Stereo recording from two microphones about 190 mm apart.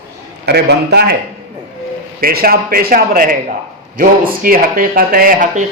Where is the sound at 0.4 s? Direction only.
60° right (ahead or behind).